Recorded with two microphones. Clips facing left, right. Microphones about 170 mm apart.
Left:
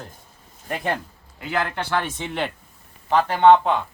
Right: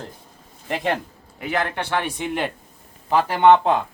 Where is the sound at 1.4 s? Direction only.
15° right (ahead or behind).